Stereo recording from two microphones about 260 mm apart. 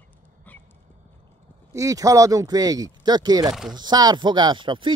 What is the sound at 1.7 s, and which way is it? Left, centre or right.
Speech, centre.